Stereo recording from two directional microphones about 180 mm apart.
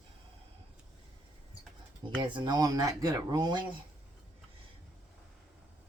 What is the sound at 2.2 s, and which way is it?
Speech, 25° right (ahead or behind).